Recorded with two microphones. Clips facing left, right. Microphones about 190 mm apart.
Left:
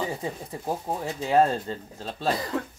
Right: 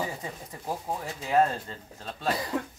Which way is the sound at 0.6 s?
25° left (ahead or behind).